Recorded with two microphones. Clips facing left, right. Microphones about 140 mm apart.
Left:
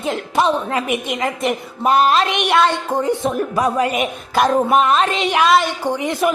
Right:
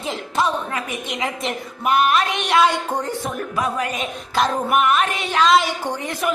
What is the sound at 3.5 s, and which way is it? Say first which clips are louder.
Music: left 4 dB; 35° left (ahead or behind).